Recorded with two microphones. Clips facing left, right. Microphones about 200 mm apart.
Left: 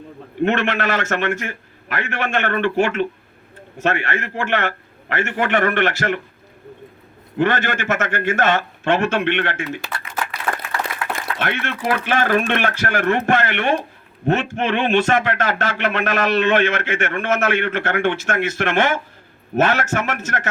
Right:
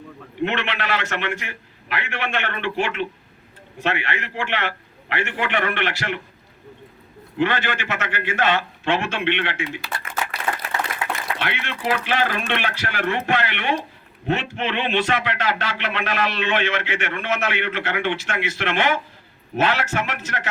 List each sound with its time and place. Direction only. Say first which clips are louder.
0.4 s a man's voice: left 6 dB; 45° left (ahead or behind)
7.3 s a man's voice: left 3 dB; 45° left (ahead or behind)
11.3 s a man's voice: left 4 dB; 50° left (ahead or behind)